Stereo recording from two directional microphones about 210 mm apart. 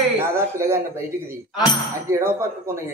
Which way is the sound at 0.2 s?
10° right (ahead or behind).